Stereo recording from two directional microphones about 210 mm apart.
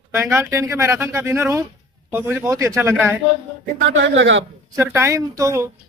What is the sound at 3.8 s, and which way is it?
Speech, 60° right (ahead or behind).